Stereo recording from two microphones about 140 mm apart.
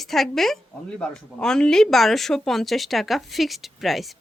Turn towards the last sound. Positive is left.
turn(degrees=0)  # may be behind; listen again after turning